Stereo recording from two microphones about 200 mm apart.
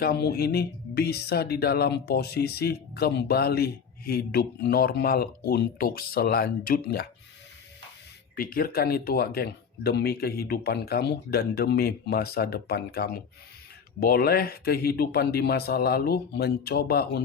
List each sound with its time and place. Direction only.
0.0 s speech: 50° left (ahead or behind)
8.4 s speech: 45° left (ahead or behind)